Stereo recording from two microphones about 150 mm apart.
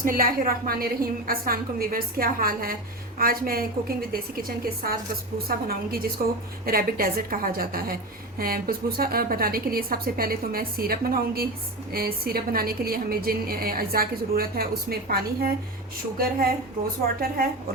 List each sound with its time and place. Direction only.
0.0 s a woman's voice: 70° right (ahead or behind); by 6.1 s 85° right
6.7 s a woman's voice: 75° right (ahead or behind)
16.1 s a woman's voice: 80° right